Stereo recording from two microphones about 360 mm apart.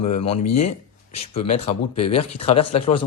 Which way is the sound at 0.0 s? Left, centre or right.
Centre.